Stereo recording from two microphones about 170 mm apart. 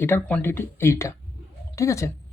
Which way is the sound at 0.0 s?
10° left (ahead or behind).